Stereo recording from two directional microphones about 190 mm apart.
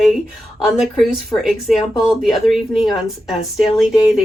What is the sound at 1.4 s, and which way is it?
A woman's voice, centre (ahead or behind).